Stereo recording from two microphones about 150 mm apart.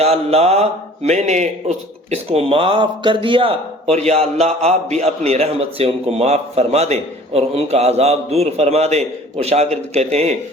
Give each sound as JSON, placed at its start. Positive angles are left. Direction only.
{"t": 0.0, "sound": "a man's voice", "side_deg": -45}